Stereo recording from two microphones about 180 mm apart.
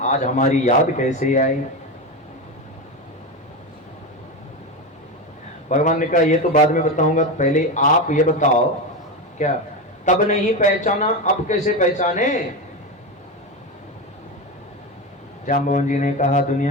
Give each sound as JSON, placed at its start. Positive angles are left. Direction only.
{"t": 0.0, "sound": "a man's voice", "side_deg": 40}
{"t": 5.6, "sound": "a man's voice", "side_deg": 45}
{"t": 15.4, "sound": "a man's voice", "side_deg": 45}